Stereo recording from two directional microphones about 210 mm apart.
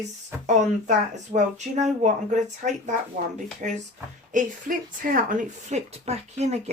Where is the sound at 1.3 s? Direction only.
35° right (ahead or behind).